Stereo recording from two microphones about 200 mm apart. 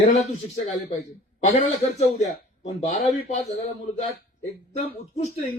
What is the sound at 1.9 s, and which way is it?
Speech, 35° left (ahead or behind).